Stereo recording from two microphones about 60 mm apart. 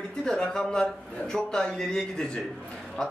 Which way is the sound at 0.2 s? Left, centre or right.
Centre.